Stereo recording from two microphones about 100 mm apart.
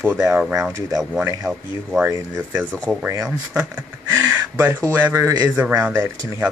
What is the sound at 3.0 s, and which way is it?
Speech, 30° right (ahead or behind).